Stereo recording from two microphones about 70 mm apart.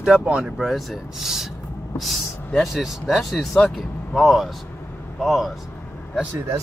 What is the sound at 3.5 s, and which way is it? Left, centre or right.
Speech, centre.